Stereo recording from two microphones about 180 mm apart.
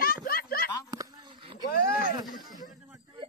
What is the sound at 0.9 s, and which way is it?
Dog, 20° right (ahead or behind).